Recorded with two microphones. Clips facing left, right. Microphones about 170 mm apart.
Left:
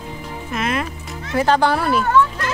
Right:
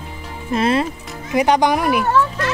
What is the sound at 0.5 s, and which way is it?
Speech, 30° right (ahead or behind).